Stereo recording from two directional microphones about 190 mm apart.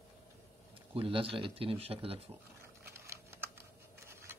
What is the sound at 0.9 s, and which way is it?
Speech, 30° right (ahead or behind).